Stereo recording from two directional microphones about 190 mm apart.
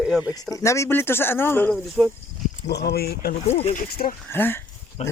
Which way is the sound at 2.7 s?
60° left (ahead or behind).